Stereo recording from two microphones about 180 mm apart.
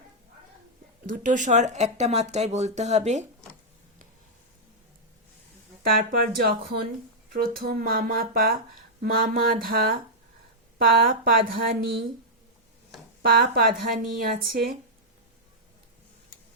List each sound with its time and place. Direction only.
1.0 s speech: 45° right (ahead or behind)
5.8 s speech: 55° right (ahead or behind)
13.2 s speech: 55° right (ahead or behind)